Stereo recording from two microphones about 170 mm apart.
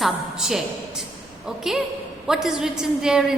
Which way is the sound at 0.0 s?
Centre (ahead or behind).